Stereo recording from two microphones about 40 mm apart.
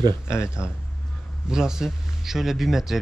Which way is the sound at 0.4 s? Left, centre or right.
Right.